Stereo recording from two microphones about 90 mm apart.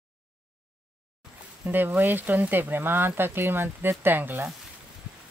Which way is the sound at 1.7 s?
20° right (ahead or behind).